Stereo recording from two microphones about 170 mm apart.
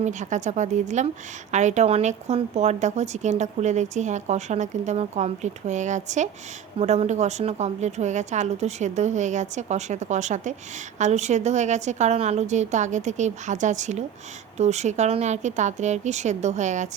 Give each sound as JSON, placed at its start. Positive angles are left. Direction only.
{"t": 0.0, "sound": "a woman's voice", "side_deg": -45}